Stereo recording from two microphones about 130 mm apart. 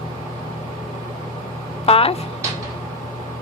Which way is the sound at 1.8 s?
45° left (ahead or behind).